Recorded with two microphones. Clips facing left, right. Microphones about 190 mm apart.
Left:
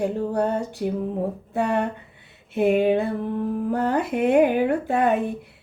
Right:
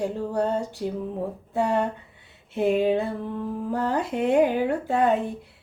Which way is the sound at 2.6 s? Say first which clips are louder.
Left 2 dB; 65° left (ahead or behind).